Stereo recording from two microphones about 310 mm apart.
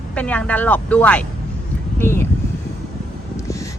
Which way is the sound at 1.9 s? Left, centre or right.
Centre.